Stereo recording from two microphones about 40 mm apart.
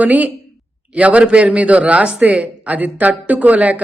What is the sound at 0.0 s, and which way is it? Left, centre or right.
Speech, right.